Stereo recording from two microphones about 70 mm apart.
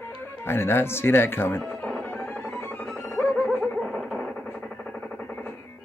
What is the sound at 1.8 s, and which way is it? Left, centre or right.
Music, centre.